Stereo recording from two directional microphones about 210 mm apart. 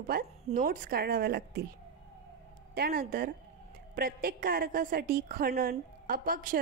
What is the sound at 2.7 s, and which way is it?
Speech, 45° right (ahead or behind).